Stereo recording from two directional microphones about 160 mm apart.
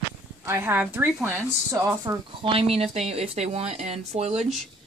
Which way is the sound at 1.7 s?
20° right (ahead or behind).